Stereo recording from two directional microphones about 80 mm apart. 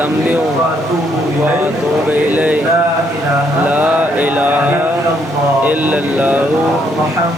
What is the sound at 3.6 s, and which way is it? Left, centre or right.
Speech, centre.